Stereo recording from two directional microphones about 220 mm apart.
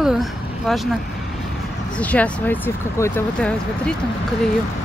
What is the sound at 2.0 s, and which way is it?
Speech, 5° left (ahead or behind).